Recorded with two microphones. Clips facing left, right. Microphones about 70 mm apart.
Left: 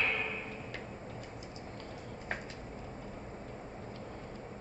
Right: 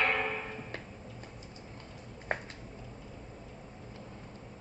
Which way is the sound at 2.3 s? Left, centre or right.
Right.